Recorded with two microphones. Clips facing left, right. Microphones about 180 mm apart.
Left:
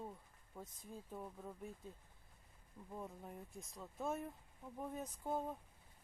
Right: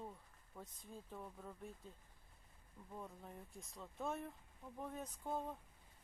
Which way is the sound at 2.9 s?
10° left (ahead or behind).